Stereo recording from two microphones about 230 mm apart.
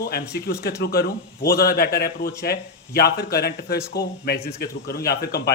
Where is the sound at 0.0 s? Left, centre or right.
Left.